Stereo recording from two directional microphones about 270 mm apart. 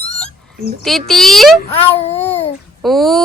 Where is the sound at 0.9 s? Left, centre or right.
Centre.